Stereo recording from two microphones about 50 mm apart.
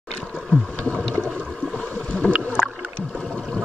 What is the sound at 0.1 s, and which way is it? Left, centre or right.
Boat, centre.